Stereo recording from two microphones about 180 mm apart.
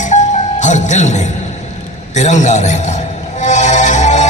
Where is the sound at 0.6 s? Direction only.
40° left (ahead or behind).